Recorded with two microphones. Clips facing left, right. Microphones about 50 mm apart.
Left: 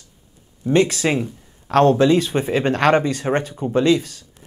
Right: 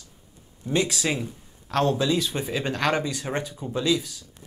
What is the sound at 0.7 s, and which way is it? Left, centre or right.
Speech, left.